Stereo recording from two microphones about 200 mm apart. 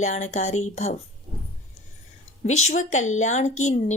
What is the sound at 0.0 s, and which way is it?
Speech, 35° left (ahead or behind).